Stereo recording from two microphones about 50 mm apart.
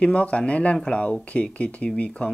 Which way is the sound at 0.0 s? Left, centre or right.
Left.